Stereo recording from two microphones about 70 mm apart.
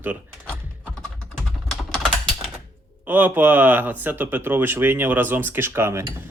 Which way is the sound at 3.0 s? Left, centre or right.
Right.